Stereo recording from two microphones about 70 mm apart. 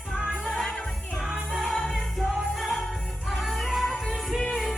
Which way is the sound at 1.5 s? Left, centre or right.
Centre.